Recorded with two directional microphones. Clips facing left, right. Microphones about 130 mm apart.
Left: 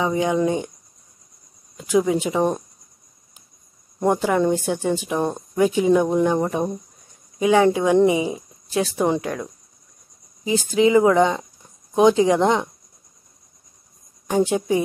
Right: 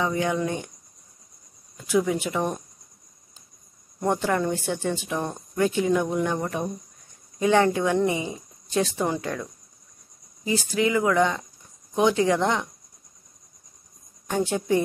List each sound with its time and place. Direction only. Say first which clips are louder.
0.0 s speech: left 5 dB; 20° left (ahead or behind)
1.8 s speech: left 4 dB; 20° left (ahead or behind)
4.0 s speech: left 5 dB; 15° left (ahead or behind)
5.5 s speech: left 3 dB; 10° left (ahead or behind)
5.9 s speech: left 6 dB; 25° left (ahead or behind)
7.3 s speech: left 4 dB; 10° left (ahead or behind)
10.4 s speech: left 6 dB; 20° left (ahead or behind)
14.2 s speech: left 6 dB; 15° left (ahead or behind)